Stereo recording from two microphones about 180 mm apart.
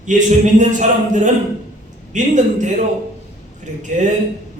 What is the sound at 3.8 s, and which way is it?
Speech, 45° right (ahead or behind).